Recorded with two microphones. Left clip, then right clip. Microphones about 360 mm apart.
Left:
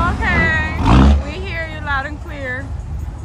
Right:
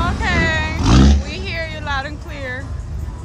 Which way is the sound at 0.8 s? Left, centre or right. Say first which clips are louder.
Left 1 dB; centre.